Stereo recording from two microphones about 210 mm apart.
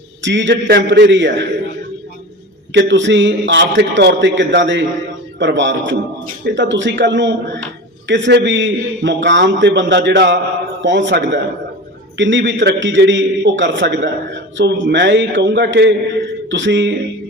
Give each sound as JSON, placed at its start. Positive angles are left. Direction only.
{"t": 0.2, "sound": "a man's voice", "side_deg": -60}
{"t": 2.7, "sound": "a man's voice", "side_deg": -60}